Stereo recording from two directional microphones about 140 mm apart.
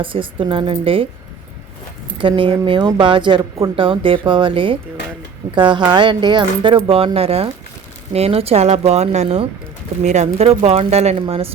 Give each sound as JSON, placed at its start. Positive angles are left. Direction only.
{"t": 0.0, "sound": "speech", "side_deg": -40}
{"t": 2.1, "sound": "speech", "side_deg": -40}